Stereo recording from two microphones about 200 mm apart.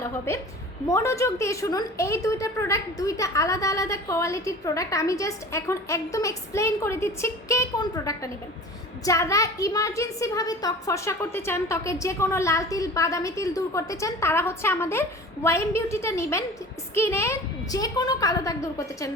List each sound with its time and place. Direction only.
0.3 s a woman's voice: 15° left (ahead or behind)